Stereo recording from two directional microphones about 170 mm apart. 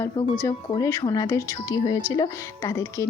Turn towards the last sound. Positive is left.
turn(degrees=15)  # may be behind; listen again after turning